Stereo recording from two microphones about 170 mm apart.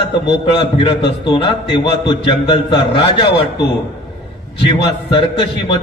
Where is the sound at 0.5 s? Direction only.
30° left (ahead or behind).